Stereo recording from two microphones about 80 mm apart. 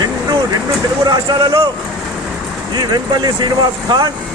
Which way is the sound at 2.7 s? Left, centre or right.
Right.